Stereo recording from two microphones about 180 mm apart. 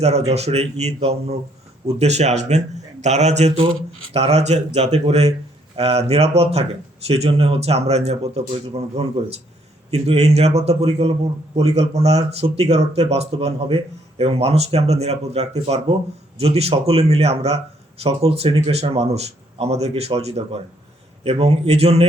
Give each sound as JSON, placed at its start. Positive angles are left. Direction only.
{"t": 0.0, "sound": "speech", "side_deg": -35}